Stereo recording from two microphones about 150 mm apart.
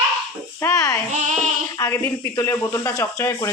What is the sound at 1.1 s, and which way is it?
Child singing, 55° right (ahead or behind).